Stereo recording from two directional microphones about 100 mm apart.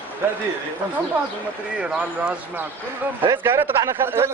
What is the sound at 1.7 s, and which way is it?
Speech, 10° right (ahead or behind).